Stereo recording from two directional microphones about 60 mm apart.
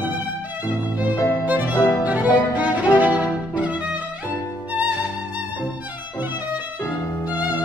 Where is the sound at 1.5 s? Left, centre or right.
Right.